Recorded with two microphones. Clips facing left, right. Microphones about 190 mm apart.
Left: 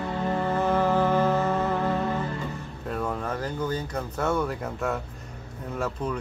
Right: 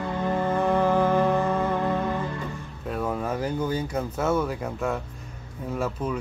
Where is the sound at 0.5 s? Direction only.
Centre (ahead or behind).